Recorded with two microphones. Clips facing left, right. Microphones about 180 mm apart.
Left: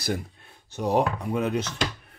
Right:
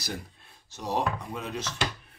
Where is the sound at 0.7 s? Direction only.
60° left (ahead or behind).